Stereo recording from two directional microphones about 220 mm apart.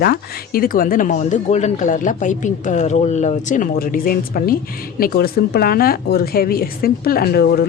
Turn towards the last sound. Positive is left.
turn(degrees=45)  # may be behind; listen again after turning